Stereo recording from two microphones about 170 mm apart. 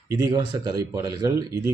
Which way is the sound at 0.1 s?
20° right (ahead or behind).